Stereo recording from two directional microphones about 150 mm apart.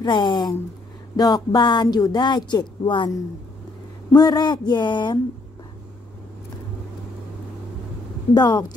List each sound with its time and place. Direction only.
0.0 s speech: 30° left (ahead or behind)
4.1 s speech: 25° left (ahead or behind)
8.4 s speech: 30° left (ahead or behind)